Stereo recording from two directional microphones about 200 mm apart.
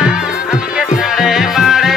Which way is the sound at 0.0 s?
5° right (ahead or behind).